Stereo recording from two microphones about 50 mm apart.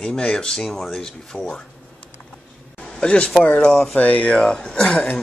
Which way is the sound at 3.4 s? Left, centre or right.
Centre.